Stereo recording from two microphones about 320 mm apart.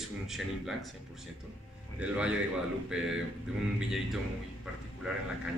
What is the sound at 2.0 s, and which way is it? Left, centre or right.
Speech, centre.